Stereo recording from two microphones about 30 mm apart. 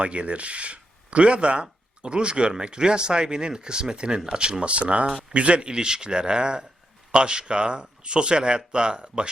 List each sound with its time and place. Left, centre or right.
0.0 s speech: right